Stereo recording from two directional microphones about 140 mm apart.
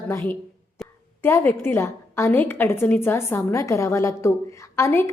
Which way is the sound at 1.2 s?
15° left (ahead or behind).